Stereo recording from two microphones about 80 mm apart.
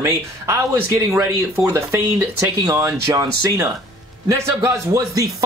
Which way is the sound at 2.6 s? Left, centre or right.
Right.